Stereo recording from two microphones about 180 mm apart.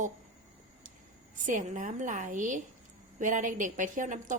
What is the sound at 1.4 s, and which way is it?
A woman's voice, 45° right (ahead or behind).